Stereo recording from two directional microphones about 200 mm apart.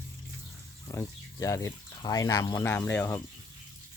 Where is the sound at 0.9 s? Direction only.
15° left (ahead or behind).